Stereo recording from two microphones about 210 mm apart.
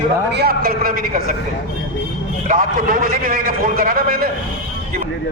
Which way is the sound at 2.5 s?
40° right (ahead or behind).